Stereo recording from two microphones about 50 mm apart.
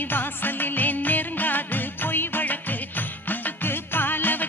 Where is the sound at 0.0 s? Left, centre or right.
Left.